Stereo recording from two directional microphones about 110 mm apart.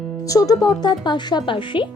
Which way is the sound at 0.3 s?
30° left (ahead or behind).